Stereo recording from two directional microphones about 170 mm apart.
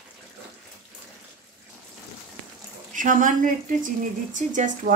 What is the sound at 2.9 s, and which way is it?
Speech, 50° right (ahead or behind).